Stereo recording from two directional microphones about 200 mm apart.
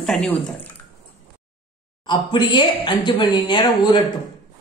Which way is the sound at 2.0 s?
20° left (ahead or behind).